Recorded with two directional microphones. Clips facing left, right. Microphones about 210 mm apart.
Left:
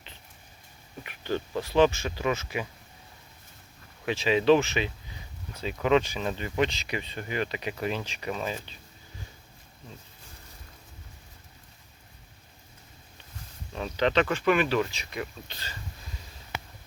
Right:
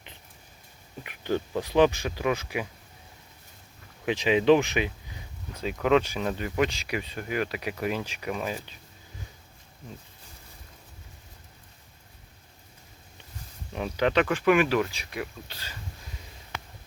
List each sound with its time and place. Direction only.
1.0 s speech: 15° right (ahead or behind)
4.0 s speech: 15° right (ahead or behind)
5.6 s speech: 5° right (ahead or behind)
13.7 s speech: 10° right (ahead or behind)